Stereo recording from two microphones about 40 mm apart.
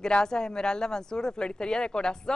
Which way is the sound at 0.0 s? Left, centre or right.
Centre.